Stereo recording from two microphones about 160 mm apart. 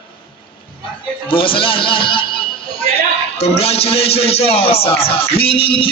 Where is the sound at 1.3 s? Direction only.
35° left (ahead or behind).